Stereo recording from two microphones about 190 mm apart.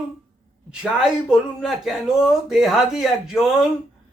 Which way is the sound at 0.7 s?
5° right (ahead or behind).